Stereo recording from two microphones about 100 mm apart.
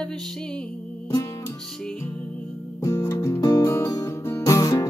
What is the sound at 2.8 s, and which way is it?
Music, 30° left (ahead or behind).